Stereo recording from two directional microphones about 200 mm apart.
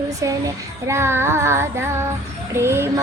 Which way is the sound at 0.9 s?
10° right (ahead or behind).